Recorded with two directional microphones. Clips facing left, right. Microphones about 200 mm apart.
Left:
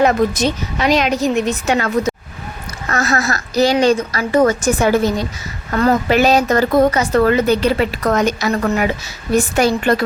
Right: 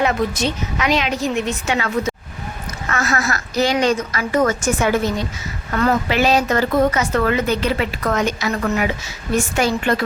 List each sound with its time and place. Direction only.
0.0 s speech: 40° left (ahead or behind)